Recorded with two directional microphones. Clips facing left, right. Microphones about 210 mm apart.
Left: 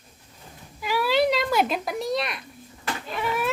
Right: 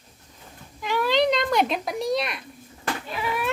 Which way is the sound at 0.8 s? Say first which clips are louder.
Even; 5° left (ahead or behind).